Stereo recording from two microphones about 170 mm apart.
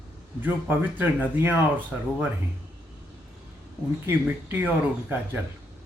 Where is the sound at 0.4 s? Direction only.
10° right (ahead or behind).